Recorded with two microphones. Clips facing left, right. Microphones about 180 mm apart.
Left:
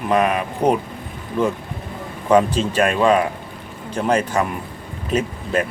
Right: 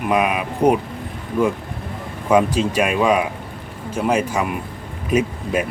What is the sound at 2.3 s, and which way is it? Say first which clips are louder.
A man's voice: even; 10° right (ahead or behind).